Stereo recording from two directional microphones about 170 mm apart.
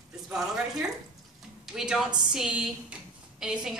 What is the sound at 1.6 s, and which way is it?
A woman's voice, centre (ahead or behind).